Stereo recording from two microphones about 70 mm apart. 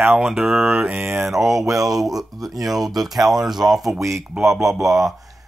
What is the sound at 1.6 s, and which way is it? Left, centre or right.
Speech, right.